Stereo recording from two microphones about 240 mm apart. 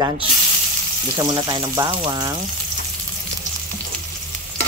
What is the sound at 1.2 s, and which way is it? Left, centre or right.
Speech, centre.